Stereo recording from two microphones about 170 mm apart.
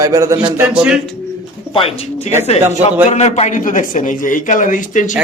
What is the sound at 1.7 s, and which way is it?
A man's voice, 35° left (ahead or behind).